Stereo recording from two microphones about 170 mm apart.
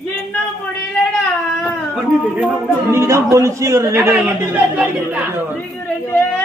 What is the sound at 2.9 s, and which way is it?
A man's voice, 15° right (ahead or behind).